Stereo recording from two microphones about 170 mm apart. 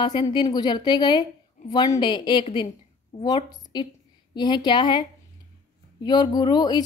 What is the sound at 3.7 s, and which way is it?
A woman's voice, 25° left (ahead or behind).